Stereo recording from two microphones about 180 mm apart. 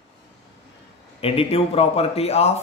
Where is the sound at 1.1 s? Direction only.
30° left (ahead or behind).